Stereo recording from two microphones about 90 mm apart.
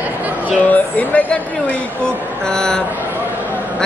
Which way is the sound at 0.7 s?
15° left (ahead or behind).